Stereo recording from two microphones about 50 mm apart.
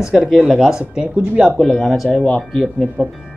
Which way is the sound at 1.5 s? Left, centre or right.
Centre.